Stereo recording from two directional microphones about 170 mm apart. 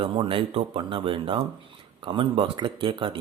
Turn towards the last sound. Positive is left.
turn(degrees=-30)  # may be behind; listen again after turning